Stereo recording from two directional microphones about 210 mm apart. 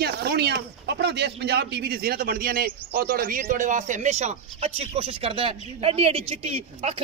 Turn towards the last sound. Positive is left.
turn(degrees=-30)  # may be behind; listen again after turning